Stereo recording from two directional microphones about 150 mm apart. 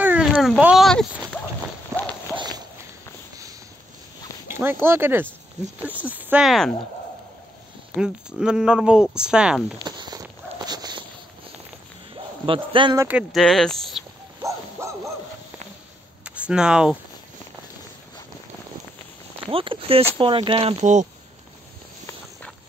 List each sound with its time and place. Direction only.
0.0 s a sound: 10° right (ahead or behind)
0.3 s a sound: 5° left (ahead or behind)
0.6 s a sound: 5° right (ahead or behind)
1.9 s run: 20° right (ahead or behind)
2.3 s walk: 30° right (ahead or behind)
4.5 s speech: 15° right (ahead or behind)
7.9 s speech: 5° right (ahead or behind)
9.8 s walk: 30° right (ahead or behind)
12.4 s speech: 35° right (ahead or behind)
13.1 s speech: centre (ahead or behind)
14.8 s bow-wow: 20° right (ahead or behind)
16.3 s speech: 5° right (ahead or behind)
19.5 s speech: 35° right (ahead or behind)
20.8 s speech: 50° right (ahead or behind)